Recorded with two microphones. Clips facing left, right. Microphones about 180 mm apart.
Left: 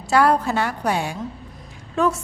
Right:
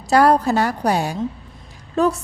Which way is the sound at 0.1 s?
40° right (ahead or behind).